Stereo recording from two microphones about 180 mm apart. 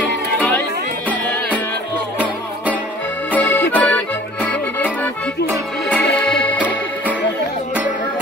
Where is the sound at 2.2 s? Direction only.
10° right (ahead or behind).